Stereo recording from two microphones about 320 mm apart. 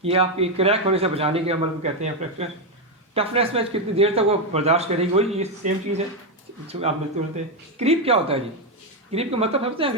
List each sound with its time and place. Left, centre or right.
0.0 s speech: centre